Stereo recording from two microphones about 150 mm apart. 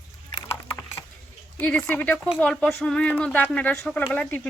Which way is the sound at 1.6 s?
10° left (ahead or behind).